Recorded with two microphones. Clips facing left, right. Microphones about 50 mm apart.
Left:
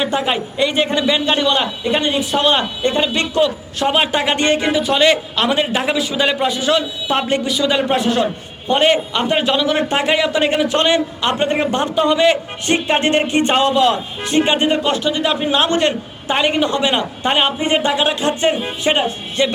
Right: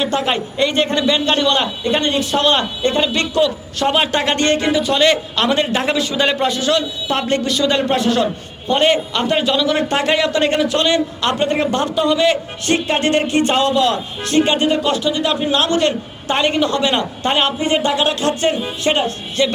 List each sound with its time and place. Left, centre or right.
0.0 s a man's voice: centre
3.8 s a man's voice: centre
10.7 s a man's voice: left
15.2 s a man's voice: centre
16.3 s a man's voice: centre